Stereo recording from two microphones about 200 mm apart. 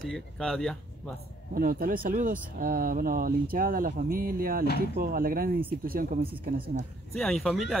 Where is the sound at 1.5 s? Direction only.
45° right (ahead or behind).